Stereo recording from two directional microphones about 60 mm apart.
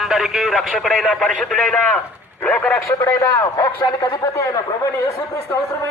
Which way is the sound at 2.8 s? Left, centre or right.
Left.